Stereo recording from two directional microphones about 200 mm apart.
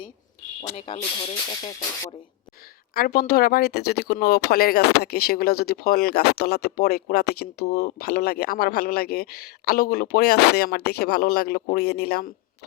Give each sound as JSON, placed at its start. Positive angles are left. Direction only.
{"t": 0.8, "sound": "speech", "side_deg": 30}
{"t": 2.9, "sound": "speech", "side_deg": 50}